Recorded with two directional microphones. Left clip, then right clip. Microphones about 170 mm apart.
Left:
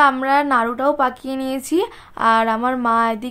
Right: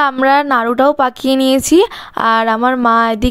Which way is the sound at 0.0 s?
45° right (ahead or behind).